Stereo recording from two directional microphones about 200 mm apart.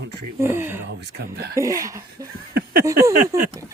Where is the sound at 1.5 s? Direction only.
15° right (ahead or behind).